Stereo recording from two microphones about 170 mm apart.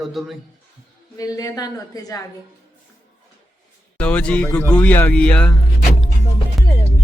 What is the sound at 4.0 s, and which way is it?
Speech, 5° left (ahead or behind).